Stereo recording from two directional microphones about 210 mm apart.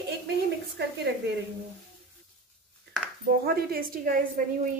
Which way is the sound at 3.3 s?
45° right (ahead or behind).